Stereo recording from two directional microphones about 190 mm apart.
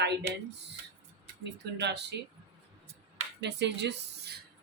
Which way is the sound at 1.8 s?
65° right (ahead or behind).